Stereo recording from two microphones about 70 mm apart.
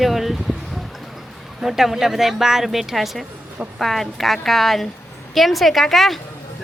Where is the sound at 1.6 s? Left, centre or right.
Centre.